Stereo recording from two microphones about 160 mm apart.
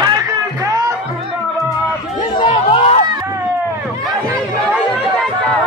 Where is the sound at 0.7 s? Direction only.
20° right (ahead or behind).